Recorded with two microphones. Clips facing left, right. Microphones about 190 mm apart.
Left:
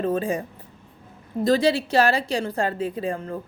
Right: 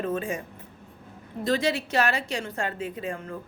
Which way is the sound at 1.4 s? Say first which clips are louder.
Left 6 dB; 35° left (ahead or behind).